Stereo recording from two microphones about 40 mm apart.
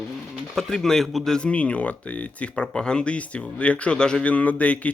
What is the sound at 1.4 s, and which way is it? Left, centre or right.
Speech, left.